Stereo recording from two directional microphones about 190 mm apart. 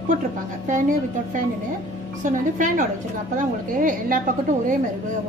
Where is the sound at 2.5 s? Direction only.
45° right (ahead or behind).